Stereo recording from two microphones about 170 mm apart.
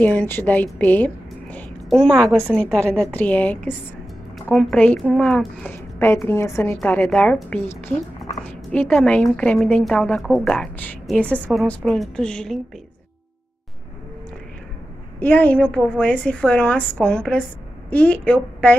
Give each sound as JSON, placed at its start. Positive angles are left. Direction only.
{"t": 0.0, "sound": "a woman's voice", "side_deg": 10}
{"t": 8.7, "sound": "a woman's voice", "side_deg": 5}
{"t": 15.1, "sound": "a woman's voice", "side_deg": 10}